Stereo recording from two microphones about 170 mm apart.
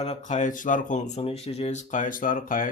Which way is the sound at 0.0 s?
45° left (ahead or behind).